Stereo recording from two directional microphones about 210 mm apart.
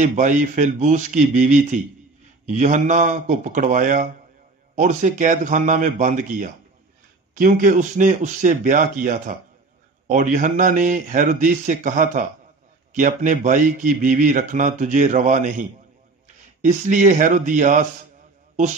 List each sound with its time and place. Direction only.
0.0 s speech: 35° right (ahead or behind)
16.6 s speech: 35° right (ahead or behind)